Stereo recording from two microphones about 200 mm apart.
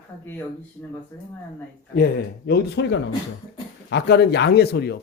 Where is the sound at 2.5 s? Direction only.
60° left (ahead or behind).